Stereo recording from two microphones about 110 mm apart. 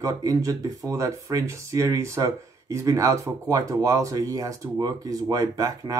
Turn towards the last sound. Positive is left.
turn(degrees=-30)  # may be behind; listen again after turning